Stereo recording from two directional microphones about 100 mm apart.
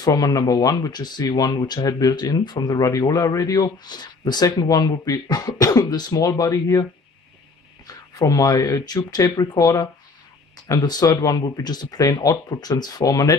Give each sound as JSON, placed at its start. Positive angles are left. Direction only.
{"t": 0.0, "sound": "speech", "side_deg": 40}